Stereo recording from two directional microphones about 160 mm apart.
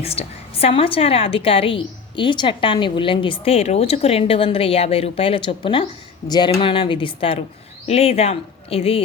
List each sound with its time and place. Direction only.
0.0 s a woman's voice: 40° left (ahead or behind)